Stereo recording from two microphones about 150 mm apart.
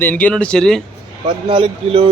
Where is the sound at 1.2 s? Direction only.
35° right (ahead or behind).